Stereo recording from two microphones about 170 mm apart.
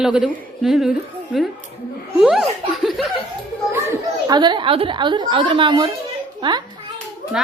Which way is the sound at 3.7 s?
15° right (ahead or behind).